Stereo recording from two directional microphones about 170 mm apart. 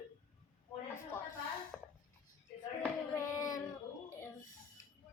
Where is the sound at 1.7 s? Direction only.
5° left (ahead or behind).